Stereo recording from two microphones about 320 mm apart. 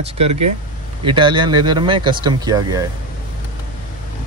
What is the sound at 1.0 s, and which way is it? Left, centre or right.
Speech, centre.